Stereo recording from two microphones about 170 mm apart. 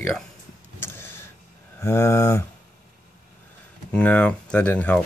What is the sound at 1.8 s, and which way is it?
Speech, 15° left (ahead or behind).